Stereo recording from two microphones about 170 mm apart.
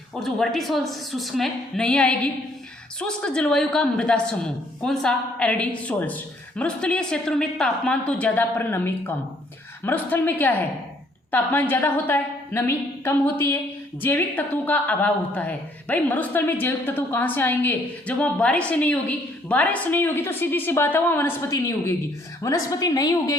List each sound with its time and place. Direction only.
0.2 s a woman's voice: centre (ahead or behind); by 23.3 s 20° left (ahead or behind)